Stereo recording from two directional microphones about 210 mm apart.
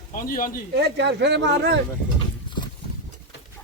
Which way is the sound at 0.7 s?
55° right (ahead or behind).